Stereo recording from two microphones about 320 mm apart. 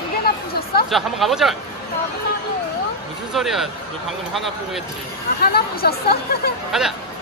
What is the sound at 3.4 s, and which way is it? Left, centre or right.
Speech, centre.